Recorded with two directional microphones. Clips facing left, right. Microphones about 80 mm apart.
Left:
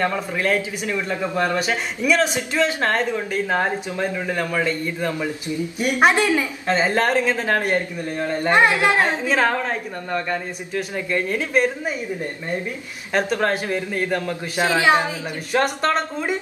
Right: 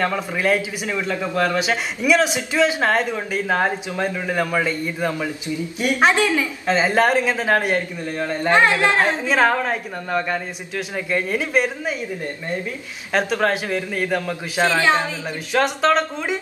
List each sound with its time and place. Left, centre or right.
0.4 s speech: centre
1.0 s a man's voice: centre
2.0 s speech: centre
5.8 s a man's voice: centre
6.7 s speech: centre
7.7 s a man's voice: centre
9.3 s a man's voice: centre
14.6 s a man's voice: centre